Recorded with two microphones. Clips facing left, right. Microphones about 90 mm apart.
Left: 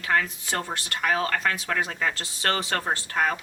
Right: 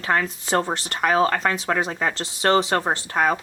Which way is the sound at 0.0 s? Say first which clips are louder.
Right 2 dB; 35° right (ahead or behind).